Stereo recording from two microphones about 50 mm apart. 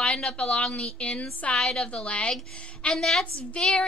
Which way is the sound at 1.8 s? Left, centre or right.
Left.